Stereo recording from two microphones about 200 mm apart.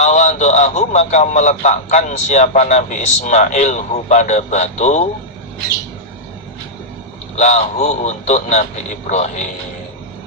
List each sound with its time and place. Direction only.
0.0 s speech: 35° left (ahead or behind)
7.3 s speech: 35° left (ahead or behind)